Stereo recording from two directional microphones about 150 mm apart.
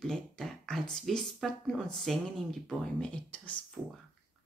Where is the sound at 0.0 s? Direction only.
5° left (ahead or behind).